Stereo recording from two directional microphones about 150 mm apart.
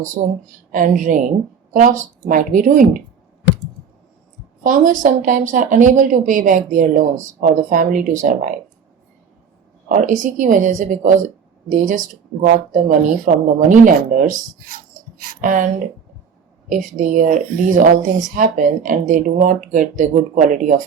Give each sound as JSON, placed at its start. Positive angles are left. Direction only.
{"t": 0.0, "sound": "a woman's voice", "side_deg": -55}
{"t": 4.6, "sound": "a woman's voice", "side_deg": -60}
{"t": 9.9, "sound": "a woman's voice", "side_deg": -55}
{"t": 15.4, "sound": "a woman's voice", "side_deg": -60}